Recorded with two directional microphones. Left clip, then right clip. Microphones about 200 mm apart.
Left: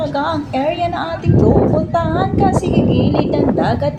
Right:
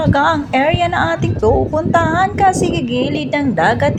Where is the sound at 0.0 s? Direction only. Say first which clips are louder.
Right 4 dB; 25° right (ahead or behind).